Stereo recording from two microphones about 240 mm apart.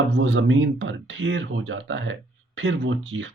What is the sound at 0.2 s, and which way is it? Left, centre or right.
Speech, right.